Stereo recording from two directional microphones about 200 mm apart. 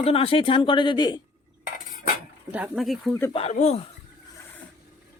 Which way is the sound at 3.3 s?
30° left (ahead or behind).